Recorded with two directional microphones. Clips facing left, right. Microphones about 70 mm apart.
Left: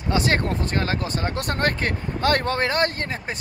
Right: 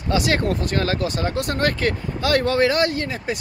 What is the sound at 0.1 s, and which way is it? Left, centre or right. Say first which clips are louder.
Speech: right 2 dB; left.